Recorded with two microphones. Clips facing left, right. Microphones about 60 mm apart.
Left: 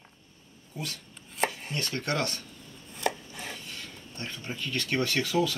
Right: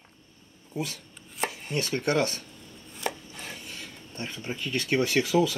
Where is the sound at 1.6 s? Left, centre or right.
Centre.